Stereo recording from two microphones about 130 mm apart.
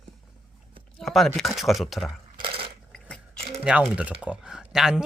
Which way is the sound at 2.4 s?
40° right (ahead or behind).